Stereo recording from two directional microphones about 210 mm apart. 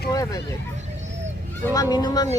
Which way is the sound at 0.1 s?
15° left (ahead or behind).